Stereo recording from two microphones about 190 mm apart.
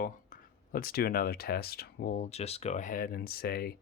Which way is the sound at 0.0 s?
50° left (ahead or behind).